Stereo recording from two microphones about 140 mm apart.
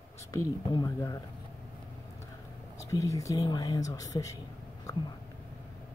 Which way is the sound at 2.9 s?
20° left (ahead or behind).